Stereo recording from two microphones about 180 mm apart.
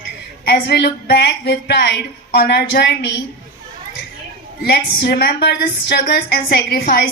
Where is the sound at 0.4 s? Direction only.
60° left (ahead or behind).